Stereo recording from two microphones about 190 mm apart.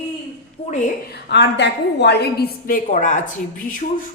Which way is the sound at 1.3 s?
65° left (ahead or behind).